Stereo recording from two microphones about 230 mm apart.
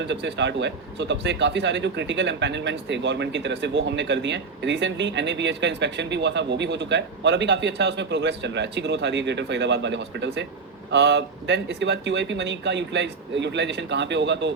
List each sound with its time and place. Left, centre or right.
0.1 s speech: right